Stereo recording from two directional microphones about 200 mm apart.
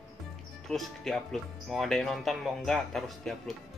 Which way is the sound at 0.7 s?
Centre (ahead or behind).